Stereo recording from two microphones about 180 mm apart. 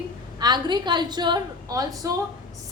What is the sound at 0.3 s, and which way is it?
A woman's voice, 25° right (ahead or behind).